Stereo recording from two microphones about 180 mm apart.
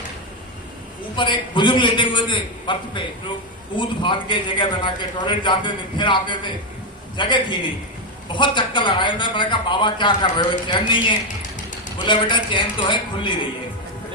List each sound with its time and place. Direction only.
1.1 s a man's voice: 25° left (ahead or behind)